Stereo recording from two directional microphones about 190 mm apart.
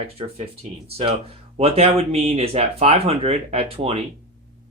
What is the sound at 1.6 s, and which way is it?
Speech, 30° right (ahead or behind).